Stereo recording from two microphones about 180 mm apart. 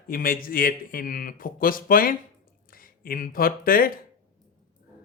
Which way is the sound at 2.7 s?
50° left (ahead or behind).